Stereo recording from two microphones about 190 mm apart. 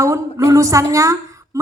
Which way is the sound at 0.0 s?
15° right (ahead or behind).